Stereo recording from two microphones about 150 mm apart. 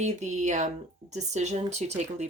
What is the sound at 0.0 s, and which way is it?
Speech, 50° right (ahead or behind).